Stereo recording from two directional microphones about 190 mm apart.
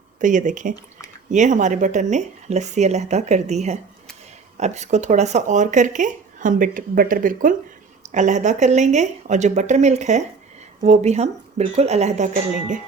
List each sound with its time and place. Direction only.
0.2 s speech: 40° right (ahead or behind)